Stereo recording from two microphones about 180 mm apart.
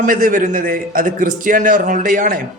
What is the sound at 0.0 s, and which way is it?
A man's voice, 50° right (ahead or behind).